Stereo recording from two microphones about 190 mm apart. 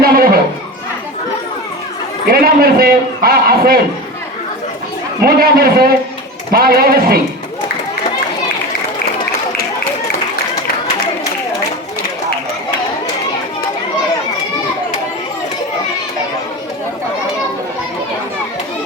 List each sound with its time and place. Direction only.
0.0 s a sound: 50° right (ahead or behind)
2.3 s a man's voice: 50° right (ahead or behind)
5.2 s a man's voice: 50° right (ahead or behind)